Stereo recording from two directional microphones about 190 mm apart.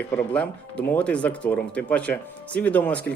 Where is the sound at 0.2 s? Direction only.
5° left (ahead or behind).